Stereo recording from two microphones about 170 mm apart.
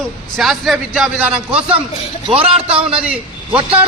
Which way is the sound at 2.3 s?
35° right (ahead or behind).